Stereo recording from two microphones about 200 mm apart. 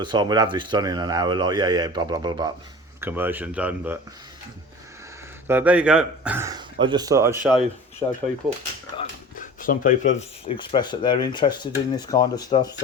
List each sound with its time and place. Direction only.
0.0 s speech: 20° right (ahead or behind)
3.0 s speech: 10° right (ahead or behind)
5.5 s speech: 10° right (ahead or behind)
7.4 s speech: centre (ahead or behind)
9.3 s a sound: 45° left (ahead or behind)
10.2 s speech: 30° left (ahead or behind)